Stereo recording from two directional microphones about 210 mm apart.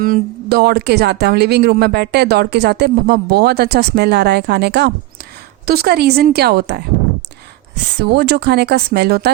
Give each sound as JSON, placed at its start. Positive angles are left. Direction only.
{"t": 0.0, "sound": "speech", "side_deg": -45}
{"t": 7.9, "sound": "speech", "side_deg": -50}